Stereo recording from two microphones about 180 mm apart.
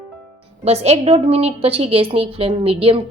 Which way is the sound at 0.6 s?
35° right (ahead or behind).